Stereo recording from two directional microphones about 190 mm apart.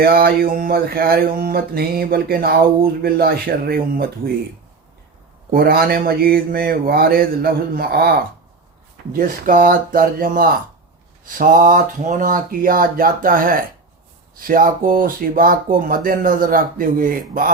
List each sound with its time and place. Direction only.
0.0 s speech: 50° right (ahead or behind)
5.5 s speech: 50° right (ahead or behind)
9.1 s speech: 45° right (ahead or behind)